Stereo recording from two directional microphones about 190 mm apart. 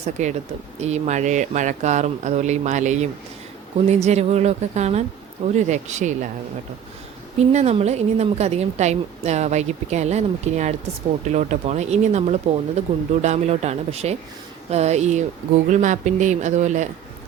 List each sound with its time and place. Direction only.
0.0 s a woman's voice: 40° right (ahead or behind)
7.3 s a woman's voice: 35° right (ahead or behind)